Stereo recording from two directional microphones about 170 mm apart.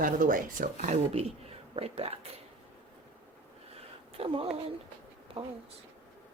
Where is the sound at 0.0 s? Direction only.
50° right (ahead or behind); by 2.1 s 35° right (ahead or behind).